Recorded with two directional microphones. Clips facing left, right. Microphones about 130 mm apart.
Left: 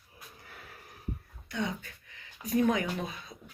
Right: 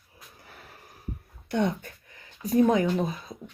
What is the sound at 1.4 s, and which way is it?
Speech, 60° right (ahead or behind).